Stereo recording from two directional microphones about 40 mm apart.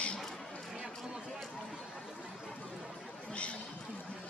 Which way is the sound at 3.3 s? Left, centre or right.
Left.